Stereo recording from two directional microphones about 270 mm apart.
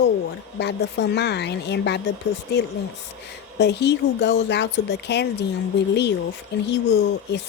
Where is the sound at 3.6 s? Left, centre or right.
Left.